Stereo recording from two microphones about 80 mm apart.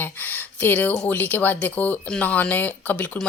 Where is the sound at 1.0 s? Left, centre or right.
Centre.